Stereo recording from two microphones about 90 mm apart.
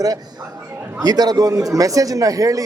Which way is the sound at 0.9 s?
45° right (ahead or behind).